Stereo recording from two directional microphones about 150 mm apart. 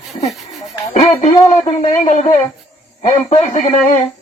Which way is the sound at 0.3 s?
Centre (ahead or behind).